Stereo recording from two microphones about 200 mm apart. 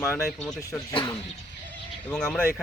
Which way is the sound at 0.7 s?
20° left (ahead or behind).